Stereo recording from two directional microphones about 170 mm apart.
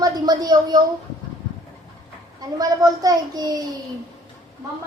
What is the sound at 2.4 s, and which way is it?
A woman's voice, 20° right (ahead or behind).